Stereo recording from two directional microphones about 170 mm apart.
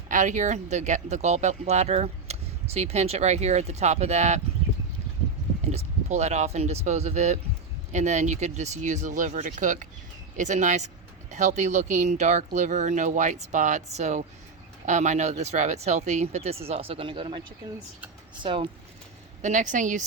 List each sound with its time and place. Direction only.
0.1 s speech: 45° right (ahead or behind)
5.6 s speech: 40° right (ahead or behind)
18.4 s speech: 35° right (ahead or behind)
19.4 s speech: 45° right (ahead or behind)